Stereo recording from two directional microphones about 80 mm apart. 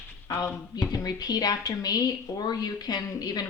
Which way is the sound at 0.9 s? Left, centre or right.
Left.